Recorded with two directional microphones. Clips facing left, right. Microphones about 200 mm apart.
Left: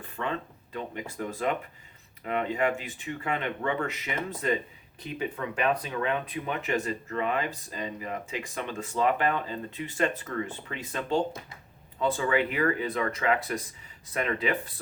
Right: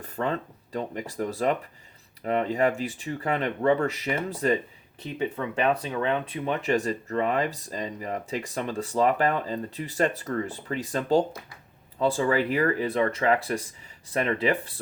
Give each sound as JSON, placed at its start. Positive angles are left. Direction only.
{"t": 0.0, "sound": "speech", "side_deg": -40}